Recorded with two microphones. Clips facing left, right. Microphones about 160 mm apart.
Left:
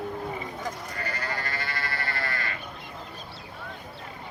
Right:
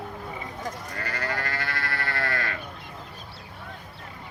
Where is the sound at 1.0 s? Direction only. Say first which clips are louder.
Right 3 dB; 70° right (ahead or behind).